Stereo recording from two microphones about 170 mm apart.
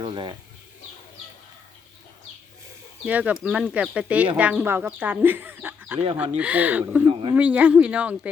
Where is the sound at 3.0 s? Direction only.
10° right (ahead or behind).